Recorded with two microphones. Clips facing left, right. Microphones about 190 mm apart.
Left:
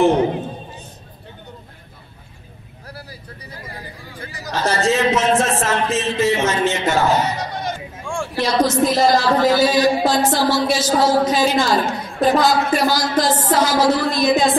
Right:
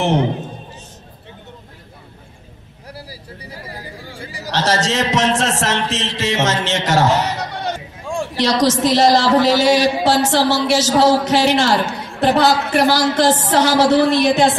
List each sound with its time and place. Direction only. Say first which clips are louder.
4.5 s a man's voice: even; 90° right; by 14.5 s 70° right (ahead or behind)